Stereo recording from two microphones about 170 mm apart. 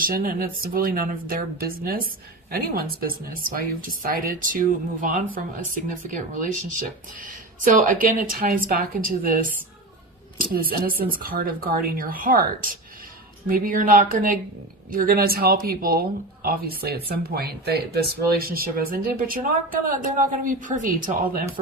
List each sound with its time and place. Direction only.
0.0 s speech: 55° right (ahead or behind)